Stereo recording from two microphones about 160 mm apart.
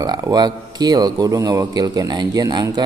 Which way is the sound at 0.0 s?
25° right (ahead or behind).